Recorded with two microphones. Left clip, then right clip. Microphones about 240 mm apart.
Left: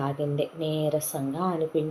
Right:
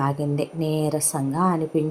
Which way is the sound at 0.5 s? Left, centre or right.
Right.